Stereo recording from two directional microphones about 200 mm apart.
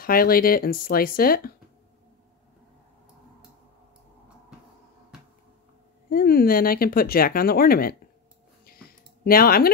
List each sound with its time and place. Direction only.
0.0 s speech: 45° left (ahead or behind)
6.0 s speech: 45° left (ahead or behind)
8.6 s a sound: 50° left (ahead or behind)